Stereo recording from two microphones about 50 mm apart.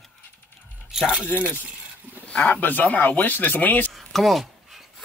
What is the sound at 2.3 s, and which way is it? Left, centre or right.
Speech, left.